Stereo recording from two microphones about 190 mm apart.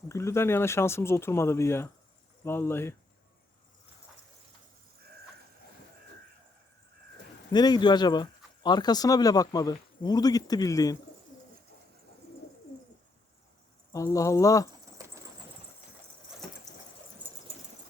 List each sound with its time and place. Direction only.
0.1 s speech: 15° left (ahead or behind)
7.5 s speech: 20° left (ahead or behind)
13.9 s speech: 15° left (ahead or behind)
15.0 s bird flight: 20° right (ahead or behind)